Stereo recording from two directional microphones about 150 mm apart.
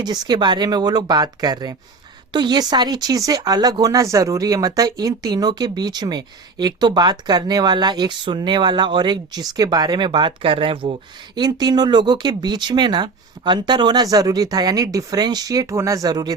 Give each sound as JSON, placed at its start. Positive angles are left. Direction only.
{"t": 0.0, "sound": "speech", "side_deg": -30}